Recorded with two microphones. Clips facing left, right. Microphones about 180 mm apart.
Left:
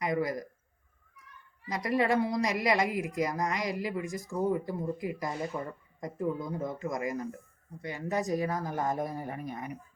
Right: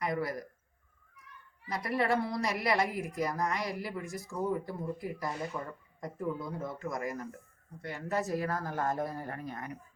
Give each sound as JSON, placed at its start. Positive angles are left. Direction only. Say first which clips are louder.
{"t": 0.0, "sound": "a woman's voice", "louder": "left 3 dB", "side_deg": 15}
{"t": 1.6, "sound": "a woman's voice", "louder": "left 3 dB", "side_deg": 20}